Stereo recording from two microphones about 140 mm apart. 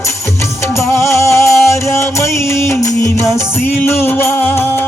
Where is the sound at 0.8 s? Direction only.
20° left (ahead or behind).